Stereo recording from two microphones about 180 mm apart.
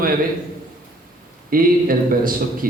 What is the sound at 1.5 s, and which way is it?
A man's voice, 55° right (ahead or behind).